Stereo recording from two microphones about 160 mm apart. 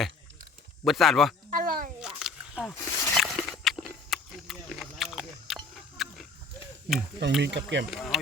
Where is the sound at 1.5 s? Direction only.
65° right (ahead or behind).